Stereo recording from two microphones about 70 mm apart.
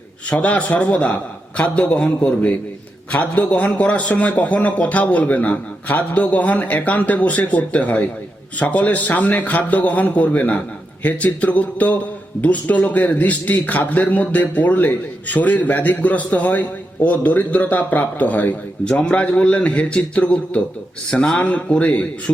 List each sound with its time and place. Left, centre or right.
0.3 s a man's voice: centre